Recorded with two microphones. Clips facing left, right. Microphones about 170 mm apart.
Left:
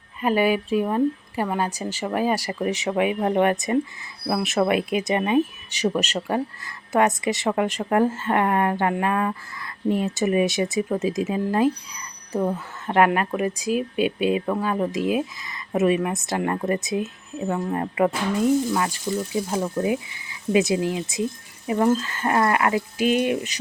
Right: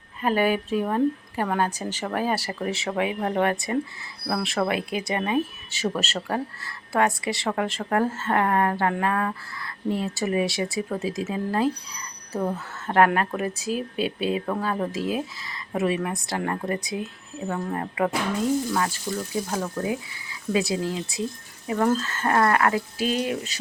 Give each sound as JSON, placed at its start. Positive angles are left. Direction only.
{"t": 0.2, "sound": "speech", "side_deg": 10}
{"t": 12.9, "sound": "speech", "side_deg": 15}